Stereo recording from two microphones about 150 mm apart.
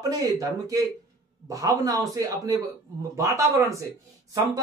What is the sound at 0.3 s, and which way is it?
Speech, 25° right (ahead or behind).